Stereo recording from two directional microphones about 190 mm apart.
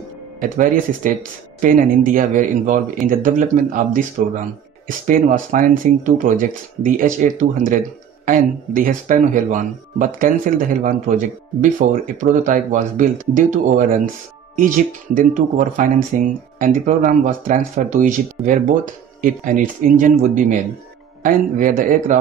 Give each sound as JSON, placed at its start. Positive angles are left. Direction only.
{"t": 0.4, "sound": "speech", "side_deg": -45}
{"t": 5.0, "sound": "speech", "side_deg": -45}